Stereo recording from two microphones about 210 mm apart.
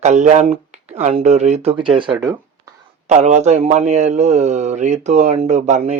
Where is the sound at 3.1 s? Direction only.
35° right (ahead or behind).